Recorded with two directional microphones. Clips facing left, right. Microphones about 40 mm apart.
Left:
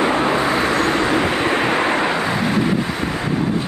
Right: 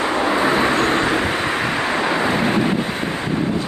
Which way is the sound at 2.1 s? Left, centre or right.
Right.